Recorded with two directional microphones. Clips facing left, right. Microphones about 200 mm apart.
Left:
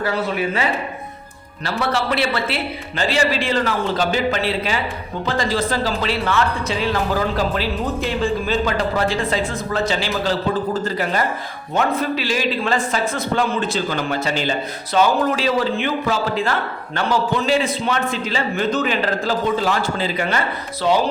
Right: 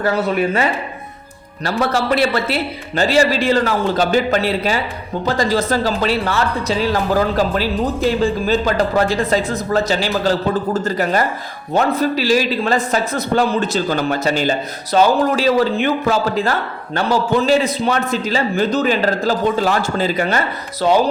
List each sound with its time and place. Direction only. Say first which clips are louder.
0.0 s a man's voice: right 4 dB; 50° right (ahead or behind)
1.6 s a man's voice: right 4 dB; 45° right (ahead or behind)